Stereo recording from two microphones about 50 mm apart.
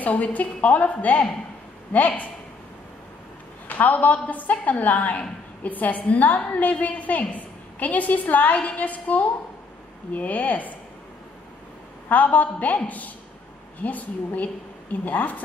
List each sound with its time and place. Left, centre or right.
0.0 s a woman's voice: left
3.6 s a woman's voice: left
12.1 s a woman's voice: left